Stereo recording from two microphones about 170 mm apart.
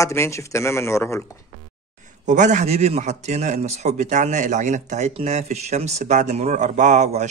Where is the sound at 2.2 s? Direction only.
45° right (ahead or behind).